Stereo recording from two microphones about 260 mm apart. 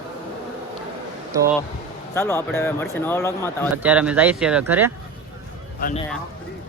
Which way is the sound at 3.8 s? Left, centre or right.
Centre.